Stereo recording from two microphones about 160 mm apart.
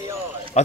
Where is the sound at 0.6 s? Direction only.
45° left (ahead or behind).